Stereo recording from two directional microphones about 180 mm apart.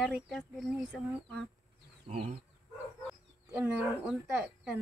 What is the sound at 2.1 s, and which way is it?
Speech, 35° right (ahead or behind).